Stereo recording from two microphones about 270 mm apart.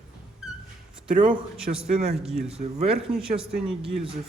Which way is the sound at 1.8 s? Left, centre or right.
Right.